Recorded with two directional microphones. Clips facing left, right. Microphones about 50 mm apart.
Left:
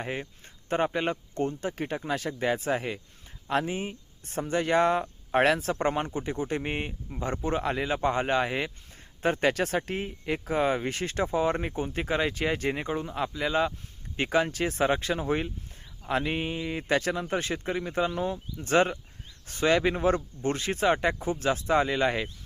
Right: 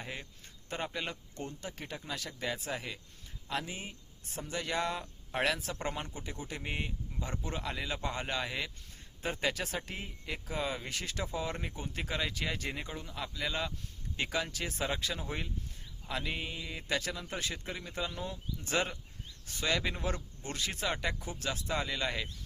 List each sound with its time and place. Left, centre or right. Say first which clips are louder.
0.0 s speech: left 9 dB; left
9.2 s speech: left 9 dB; left
14.2 s speech: left 9 dB; left